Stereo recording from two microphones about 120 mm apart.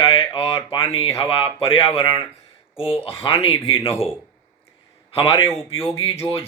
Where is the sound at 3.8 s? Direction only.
20° left (ahead or behind).